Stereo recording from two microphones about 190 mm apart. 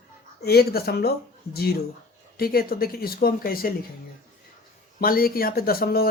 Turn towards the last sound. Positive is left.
turn(degrees=55)  # may be behind; listen again after turning